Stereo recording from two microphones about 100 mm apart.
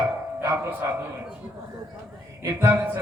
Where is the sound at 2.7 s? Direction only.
20° right (ahead or behind).